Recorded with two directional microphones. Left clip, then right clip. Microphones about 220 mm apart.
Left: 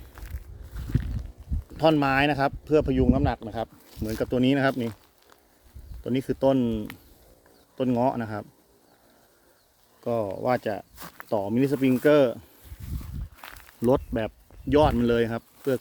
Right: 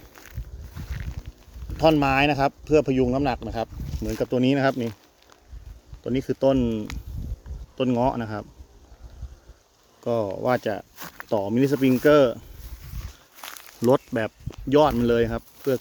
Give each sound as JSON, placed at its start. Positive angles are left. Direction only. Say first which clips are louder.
{"t": 0.1, "sound": "a sound", "louder": "right 3 dB", "side_deg": -10}
{"t": 1.7, "sound": "speech", "louder": "right 2 dB", "side_deg": 0}
{"t": 10.0, "sound": "speech", "louder": "right 2 dB", "side_deg": -10}
{"t": 13.3, "sound": "walk", "louder": "right 7 dB", "side_deg": -15}
{"t": 13.9, "sound": "speech", "louder": "right 3 dB", "side_deg": 0}